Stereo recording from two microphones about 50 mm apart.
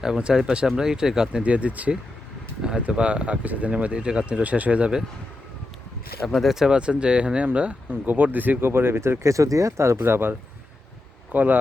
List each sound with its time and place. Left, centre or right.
0.0 s speech: centre
6.2 s speech: centre
6.7 s speech: right
8.0 s speech: right
11.3 s speech: right